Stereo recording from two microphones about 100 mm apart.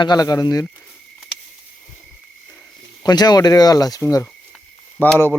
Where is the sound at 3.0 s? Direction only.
45° left (ahead or behind).